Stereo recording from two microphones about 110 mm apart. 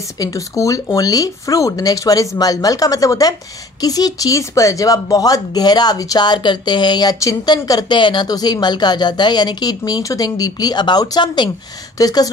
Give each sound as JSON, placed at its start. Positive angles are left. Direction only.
{"t": 0.2, "sound": "a woman's voice", "side_deg": 30}